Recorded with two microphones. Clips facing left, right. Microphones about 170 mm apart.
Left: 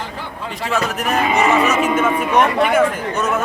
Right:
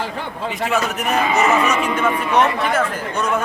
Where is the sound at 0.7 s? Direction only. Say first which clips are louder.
Left 2 dB; centre (ahead or behind).